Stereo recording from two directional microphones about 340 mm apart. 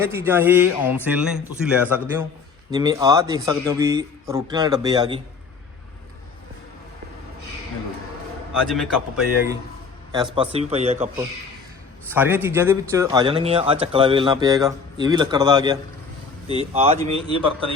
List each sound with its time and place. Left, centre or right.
0.1 s a man's voice: centre
8.6 s a man's voice: centre
10.3 s speech: centre
12.1 s speech: centre